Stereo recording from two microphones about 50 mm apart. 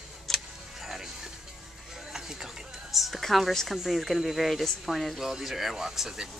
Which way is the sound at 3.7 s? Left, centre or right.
Centre.